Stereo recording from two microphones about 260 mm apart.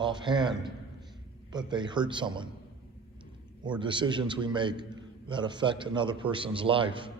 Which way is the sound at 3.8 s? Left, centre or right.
Centre.